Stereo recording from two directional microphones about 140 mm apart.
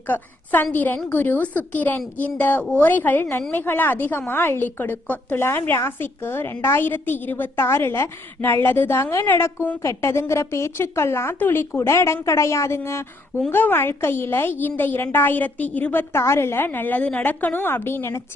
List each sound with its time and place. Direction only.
0.1 s a woman's voice: 15° left (ahead or behind)